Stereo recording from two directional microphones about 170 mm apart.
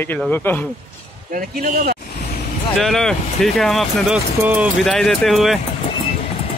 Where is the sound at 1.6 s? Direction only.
60° right (ahead or behind).